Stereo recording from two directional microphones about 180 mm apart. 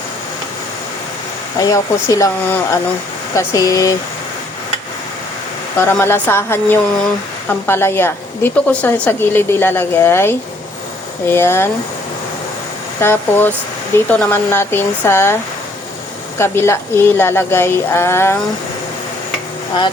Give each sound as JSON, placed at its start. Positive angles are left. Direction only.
{"t": 1.5, "sound": "speech", "side_deg": 20}
{"t": 5.8, "sound": "a woman's voice", "side_deg": 15}
{"t": 13.0, "sound": "a woman's voice", "side_deg": 15}
{"t": 16.4, "sound": "a woman's voice", "side_deg": 15}